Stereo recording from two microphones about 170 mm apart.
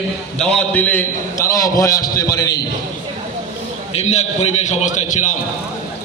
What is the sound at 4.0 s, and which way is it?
A man's voice, 40° left (ahead or behind).